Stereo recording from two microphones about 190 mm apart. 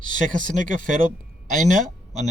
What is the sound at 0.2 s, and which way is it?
A man's voice, 45° right (ahead or behind).